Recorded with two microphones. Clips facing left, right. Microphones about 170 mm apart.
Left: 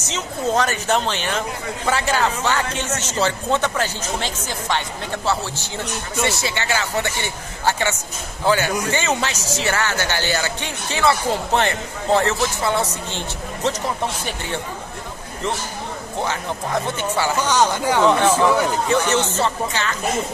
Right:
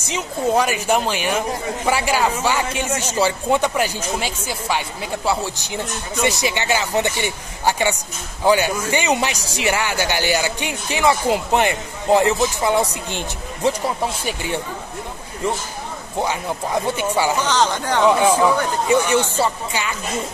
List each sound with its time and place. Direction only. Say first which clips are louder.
0.0 s speech: right 2 dB; 10° right (ahead or behind)
16.2 s speech: right 3 dB; 10° right (ahead or behind)
17.4 s speech: left 1 dB; 10° left (ahead or behind)
18.0 s speech: right 2 dB; 10° right (ahead or behind)